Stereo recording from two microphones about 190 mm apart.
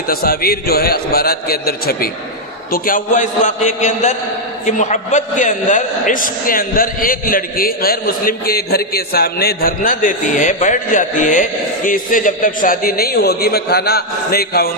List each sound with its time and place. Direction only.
0.1 s a man's voice: 50° left (ahead or behind)